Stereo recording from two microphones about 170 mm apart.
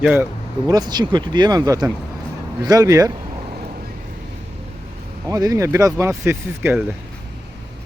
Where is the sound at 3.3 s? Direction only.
45° right (ahead or behind).